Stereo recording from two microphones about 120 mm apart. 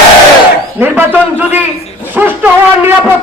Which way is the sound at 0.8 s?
15° right (ahead or behind).